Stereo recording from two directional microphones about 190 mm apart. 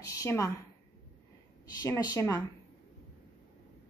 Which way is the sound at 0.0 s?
15° left (ahead or behind).